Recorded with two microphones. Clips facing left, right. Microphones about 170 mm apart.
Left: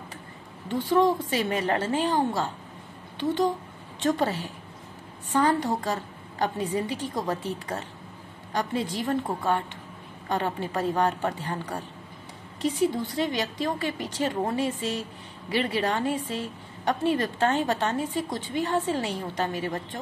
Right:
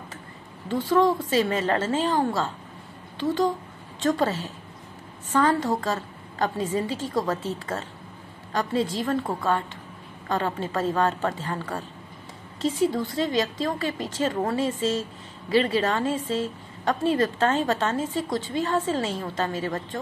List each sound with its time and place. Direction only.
0.8 s a woman's voice: 15° left (ahead or behind)